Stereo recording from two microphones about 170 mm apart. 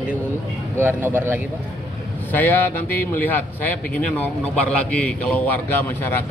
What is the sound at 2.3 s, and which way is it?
Speech, 10° left (ahead or behind).